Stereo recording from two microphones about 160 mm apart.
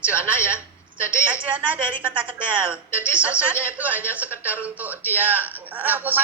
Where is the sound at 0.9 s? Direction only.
15° left (ahead or behind).